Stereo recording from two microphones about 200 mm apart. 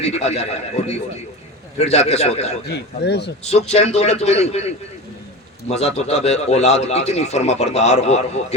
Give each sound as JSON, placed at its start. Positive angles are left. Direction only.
{"t": 0.0, "sound": "a man's voice", "side_deg": 30}
{"t": 2.6, "sound": "speech", "side_deg": 55}
{"t": 3.4, "sound": "a man's voice", "side_deg": 30}